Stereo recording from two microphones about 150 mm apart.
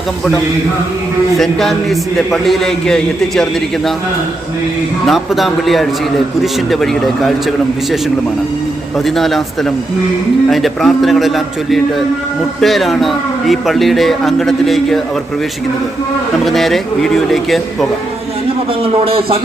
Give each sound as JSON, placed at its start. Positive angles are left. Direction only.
{"t": 1.4, "sound": "a man's voice", "side_deg": 0}
{"t": 5.0, "sound": "a man's voice", "side_deg": 0}
{"t": 9.0, "sound": "a man's voice", "side_deg": 0}
{"t": 16.4, "sound": "a man's voice", "side_deg": 0}
{"t": 18.8, "sound": "speech", "side_deg": -40}